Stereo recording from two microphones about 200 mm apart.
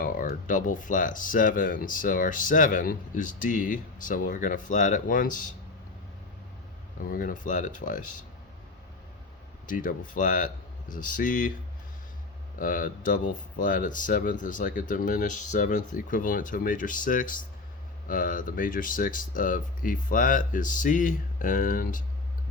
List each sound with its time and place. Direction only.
0.0 s speech: 45° left (ahead or behind)
7.0 s speech: 45° left (ahead or behind)
9.6 s speech: 40° left (ahead or behind)
12.5 s speech: 45° left (ahead or behind)